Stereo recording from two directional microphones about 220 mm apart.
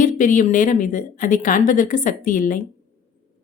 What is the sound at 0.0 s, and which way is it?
A woman's voice, 35° left (ahead or behind).